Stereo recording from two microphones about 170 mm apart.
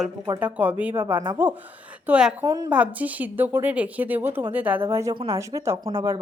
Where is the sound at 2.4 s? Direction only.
20° right (ahead or behind).